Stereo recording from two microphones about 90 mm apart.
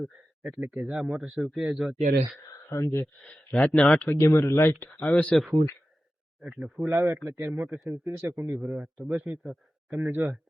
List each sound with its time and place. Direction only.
0.6 s a man's voice: 15° right (ahead or behind)
2.5 s speech: 30° left (ahead or behind)
3.2 s speech: 5° left (ahead or behind)
4.1 s speech: 30° left (ahead or behind)
5.3 s a man's voice: centre (ahead or behind)
6.8 s a man's voice: 25° right (ahead or behind)